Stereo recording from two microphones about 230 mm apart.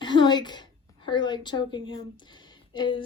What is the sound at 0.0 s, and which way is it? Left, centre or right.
A woman's voice, centre.